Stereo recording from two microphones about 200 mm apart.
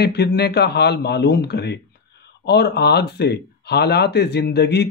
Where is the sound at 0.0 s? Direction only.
55° left (ahead or behind).